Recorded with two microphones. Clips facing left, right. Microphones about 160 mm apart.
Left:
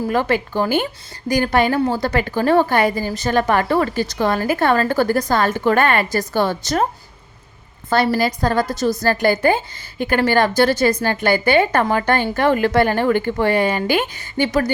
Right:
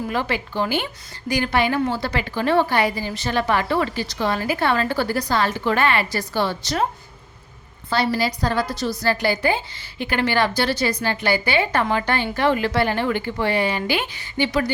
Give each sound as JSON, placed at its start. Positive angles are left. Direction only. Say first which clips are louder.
{"t": 0.1, "sound": "a woman's voice", "louder": "left 6 dB", "side_deg": 50}
{"t": 7.9, "sound": "a woman's voice", "louder": "left 4 dB", "side_deg": 50}